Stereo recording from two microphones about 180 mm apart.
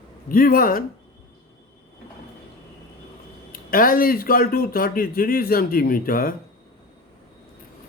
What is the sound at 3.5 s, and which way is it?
Speech, 50° left (ahead or behind).